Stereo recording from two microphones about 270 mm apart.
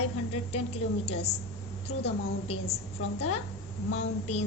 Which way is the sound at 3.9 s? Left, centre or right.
Left.